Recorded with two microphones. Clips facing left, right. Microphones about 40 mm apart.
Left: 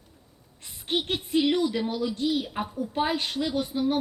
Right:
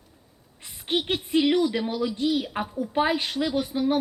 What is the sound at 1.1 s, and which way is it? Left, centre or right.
A woman's voice, centre.